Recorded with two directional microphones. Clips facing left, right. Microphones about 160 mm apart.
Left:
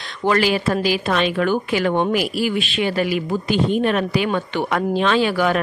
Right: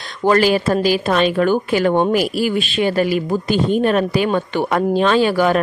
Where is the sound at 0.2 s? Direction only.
40° right (ahead or behind).